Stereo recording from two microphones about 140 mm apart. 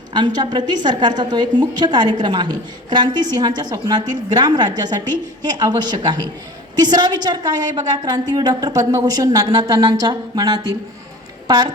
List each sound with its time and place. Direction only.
0.1 s a woman's voice: 30° right (ahead or behind)